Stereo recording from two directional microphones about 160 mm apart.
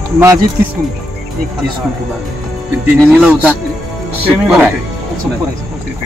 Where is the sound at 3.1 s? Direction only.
5° right (ahead or behind).